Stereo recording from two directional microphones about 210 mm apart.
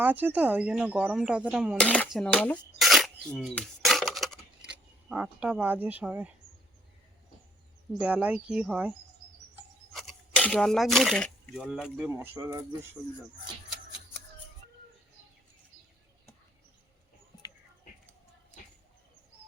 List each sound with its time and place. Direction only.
0.0 s speech: 10° right (ahead or behind)
7.9 s speech: 5° right (ahead or behind)